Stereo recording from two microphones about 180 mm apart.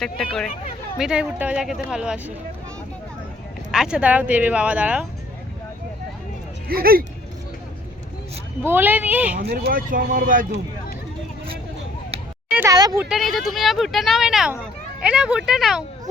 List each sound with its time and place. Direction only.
0.0 s speech: 5° left (ahead or behind)
3.7 s speech: 5° right (ahead or behind)
6.7 s speech: 55° right (ahead or behind)
8.6 s speech: 10° right (ahead or behind)
9.4 s speech: 60° right (ahead or behind)
12.5 s a sound: 10° right (ahead or behind)
12.7 s speech: 20° right (ahead or behind)
13.1 s speech: centre (ahead or behind)